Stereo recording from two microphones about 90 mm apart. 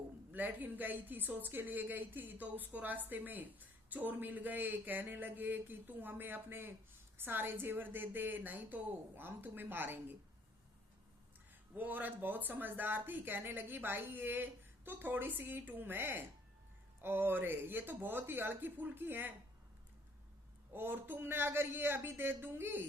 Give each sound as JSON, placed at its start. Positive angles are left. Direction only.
{"t": 0.3, "sound": "a woman's voice", "side_deg": -20}
{"t": 11.7, "sound": "a woman's voice", "side_deg": -20}
{"t": 20.7, "sound": "a woman's voice", "side_deg": -25}